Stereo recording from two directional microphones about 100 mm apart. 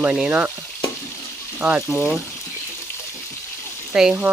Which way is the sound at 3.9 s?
5° right (ahead or behind).